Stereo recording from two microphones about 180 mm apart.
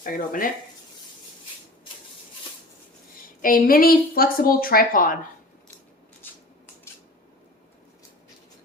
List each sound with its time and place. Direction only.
0.0 s a woman's voice: 50° left (ahead or behind)
3.4 s a woman's voice: 50° left (ahead or behind)
6.2 s a sound: 10° left (ahead or behind)